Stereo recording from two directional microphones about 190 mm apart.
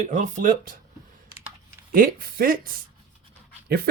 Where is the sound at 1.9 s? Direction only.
50° right (ahead or behind).